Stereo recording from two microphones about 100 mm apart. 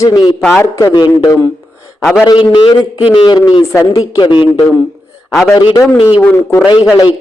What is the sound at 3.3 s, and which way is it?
A man's voice, 40° left (ahead or behind).